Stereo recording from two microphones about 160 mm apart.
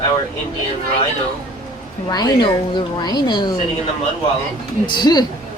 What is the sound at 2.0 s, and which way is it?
A woman's voice, 25° left (ahead or behind).